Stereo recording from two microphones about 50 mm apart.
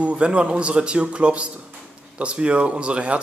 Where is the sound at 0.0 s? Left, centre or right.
Right.